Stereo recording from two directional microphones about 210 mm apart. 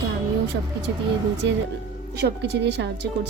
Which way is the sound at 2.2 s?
55° right (ahead or behind).